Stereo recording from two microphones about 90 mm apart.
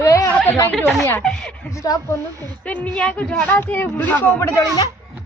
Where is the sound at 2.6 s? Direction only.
15° left (ahead or behind).